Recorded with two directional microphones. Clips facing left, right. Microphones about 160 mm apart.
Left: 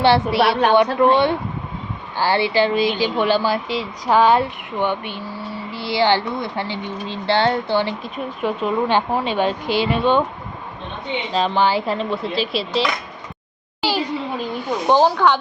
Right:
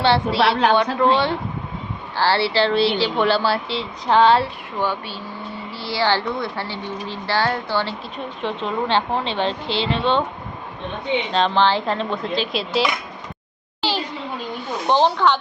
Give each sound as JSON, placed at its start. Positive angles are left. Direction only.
{"t": 0.1, "sound": "a woman's voice", "side_deg": -25}
{"t": 0.5, "sound": "speech", "side_deg": 15}
{"t": 11.3, "sound": "speech", "side_deg": 5}
{"t": 14.8, "sound": "speech", "side_deg": 10}